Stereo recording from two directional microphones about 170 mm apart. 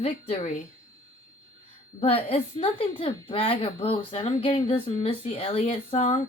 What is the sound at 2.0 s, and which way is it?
A woman's voice, 35° left (ahead or behind).